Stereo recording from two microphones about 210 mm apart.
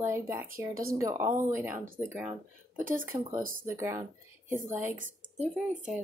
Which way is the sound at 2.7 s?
40° right (ahead or behind).